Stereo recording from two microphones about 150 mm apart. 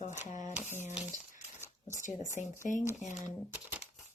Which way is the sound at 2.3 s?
60° left (ahead or behind).